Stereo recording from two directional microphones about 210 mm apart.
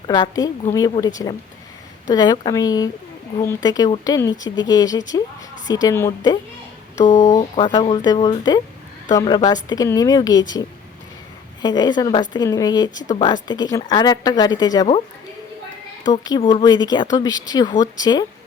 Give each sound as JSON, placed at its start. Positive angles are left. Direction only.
{"t": 0.1, "sound": "speech", "side_deg": 20}
{"t": 6.9, "sound": "speech", "side_deg": 35}
{"t": 7.5, "sound": "speech", "side_deg": 20}
{"t": 16.0, "sound": "speech", "side_deg": 20}